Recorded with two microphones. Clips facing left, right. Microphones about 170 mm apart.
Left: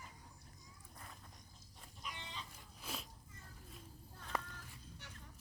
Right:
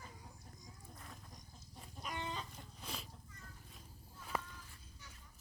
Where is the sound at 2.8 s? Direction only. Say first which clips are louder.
Left 1 dB; centre (ahead or behind).